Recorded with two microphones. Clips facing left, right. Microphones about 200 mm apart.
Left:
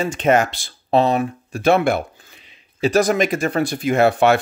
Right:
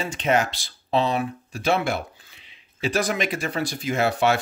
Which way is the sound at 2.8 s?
45° left (ahead or behind).